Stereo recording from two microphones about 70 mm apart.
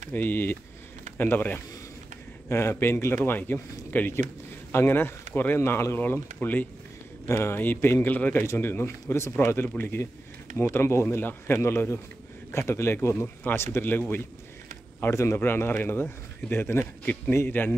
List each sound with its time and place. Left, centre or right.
0.1 s speech: left
2.5 s a man's voice: left
8.8 s a man's voice: left
15.0 s a man's voice: left